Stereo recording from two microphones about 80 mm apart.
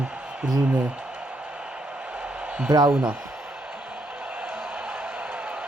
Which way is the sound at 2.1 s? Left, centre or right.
Centre.